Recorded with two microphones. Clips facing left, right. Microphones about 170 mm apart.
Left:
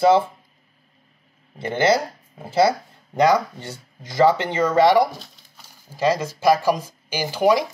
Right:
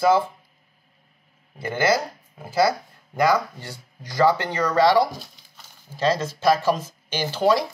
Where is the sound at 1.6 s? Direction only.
25° left (ahead or behind).